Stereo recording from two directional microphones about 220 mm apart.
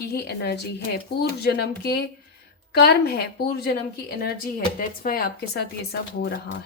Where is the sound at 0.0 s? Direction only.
45° left (ahead or behind).